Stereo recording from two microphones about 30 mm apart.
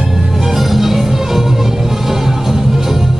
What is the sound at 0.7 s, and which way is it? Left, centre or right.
Music, centre.